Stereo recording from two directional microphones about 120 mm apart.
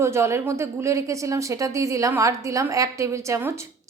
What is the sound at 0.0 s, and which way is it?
A woman's voice, 20° right (ahead or behind).